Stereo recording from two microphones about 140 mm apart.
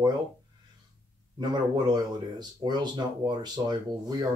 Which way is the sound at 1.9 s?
30° right (ahead or behind).